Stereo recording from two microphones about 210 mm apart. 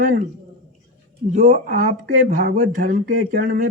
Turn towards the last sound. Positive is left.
turn(degrees=-45)  # may be behind; listen again after turning